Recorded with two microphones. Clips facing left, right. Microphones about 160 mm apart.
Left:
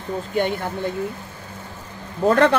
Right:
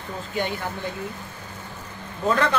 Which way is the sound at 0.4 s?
50° left (ahead or behind).